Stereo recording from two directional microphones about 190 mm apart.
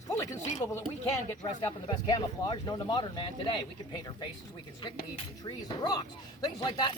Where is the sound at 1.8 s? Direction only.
20° left (ahead or behind).